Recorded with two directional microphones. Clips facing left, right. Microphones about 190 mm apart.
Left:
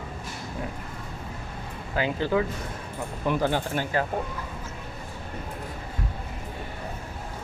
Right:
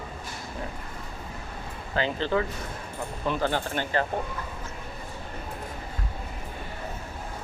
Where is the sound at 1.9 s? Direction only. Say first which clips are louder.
Left 1 dB; 10° left (ahead or behind).